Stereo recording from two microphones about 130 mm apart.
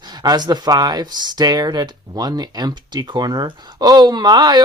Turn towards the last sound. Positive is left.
turn(degrees=-35)  # may be behind; listen again after turning